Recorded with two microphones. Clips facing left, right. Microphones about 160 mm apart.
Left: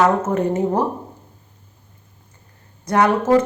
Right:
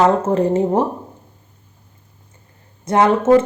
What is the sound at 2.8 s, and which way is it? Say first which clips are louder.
Speech: right 3 dB; 25° right (ahead or behind).